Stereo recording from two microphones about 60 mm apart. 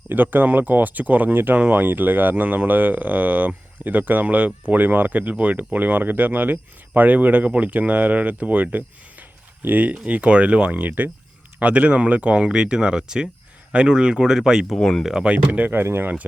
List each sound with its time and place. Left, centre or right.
0.1 s speech: right; by 14.8 s centre
14.8 s speech: centre
15.0 s speech: centre
15.8 s speech: right